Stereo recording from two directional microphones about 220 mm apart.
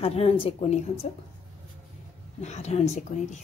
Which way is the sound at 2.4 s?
30° left (ahead or behind).